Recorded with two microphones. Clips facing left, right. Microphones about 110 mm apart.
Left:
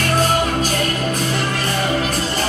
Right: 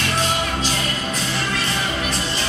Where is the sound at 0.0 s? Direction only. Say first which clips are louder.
Left 5 dB; 45° left (ahead or behind).